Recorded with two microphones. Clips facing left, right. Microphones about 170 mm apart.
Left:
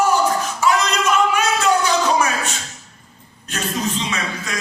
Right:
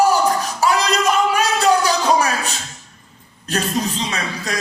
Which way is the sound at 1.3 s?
35° right (ahead or behind).